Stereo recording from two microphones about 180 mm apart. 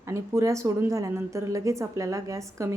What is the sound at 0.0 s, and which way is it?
A woman's voice, 15° right (ahead or behind).